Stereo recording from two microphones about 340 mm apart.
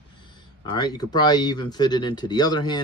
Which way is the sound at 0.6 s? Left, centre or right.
Centre.